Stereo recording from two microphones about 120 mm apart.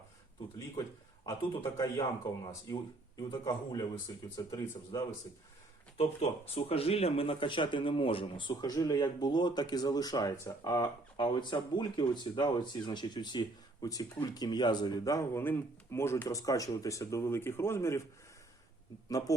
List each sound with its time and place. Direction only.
0.8 s a man's voice: 30° left (ahead or behind)
3.2 s speech: 35° left (ahead or behind)
6.0 s speech: 55° left (ahead or behind); by 18.0 s 25° left (ahead or behind)